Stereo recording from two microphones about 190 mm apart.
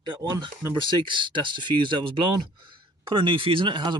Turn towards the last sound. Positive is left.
turn(degrees=-25)  # may be behind; listen again after turning